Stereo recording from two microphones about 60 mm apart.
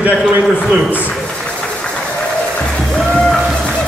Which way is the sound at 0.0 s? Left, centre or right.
Right.